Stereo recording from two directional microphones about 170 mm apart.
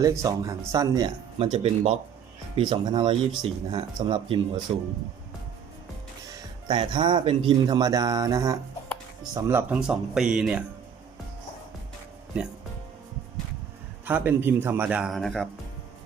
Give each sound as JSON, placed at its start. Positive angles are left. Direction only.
{"t": 0.0, "sound": "speech", "side_deg": -20}
{"t": 1.5, "sound": "speech", "side_deg": -40}
{"t": 2.6, "sound": "speech", "side_deg": -25}
{"t": 6.7, "sound": "speech", "side_deg": -25}
{"t": 14.0, "sound": "speech", "side_deg": -10}